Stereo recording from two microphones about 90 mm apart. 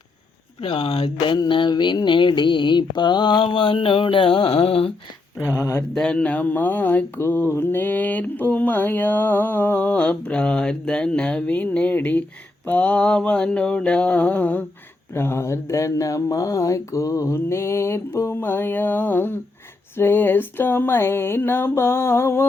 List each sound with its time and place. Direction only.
0.6 s speech: 80° left
1.4 s mantra: 60° left (ahead or behind); by 4.9 s 90° left
5.5 s speech: 30° left (ahead or behind)
5.9 s speech: 10° left (ahead or behind)
12.6 s mantra: 15° left (ahead or behind)
15.1 s speech: 30° left (ahead or behind)